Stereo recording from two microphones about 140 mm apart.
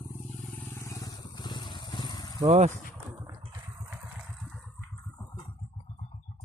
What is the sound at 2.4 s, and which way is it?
Speech, 55° right (ahead or behind).